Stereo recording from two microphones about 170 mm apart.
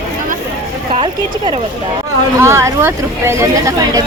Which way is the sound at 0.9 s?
35° right (ahead or behind).